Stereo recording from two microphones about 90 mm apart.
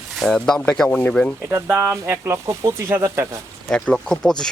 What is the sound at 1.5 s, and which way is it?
Speech, 35° right (ahead or behind).